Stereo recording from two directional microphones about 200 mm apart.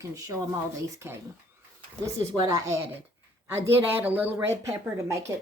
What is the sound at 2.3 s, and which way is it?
A woman's voice, 20° right (ahead or behind).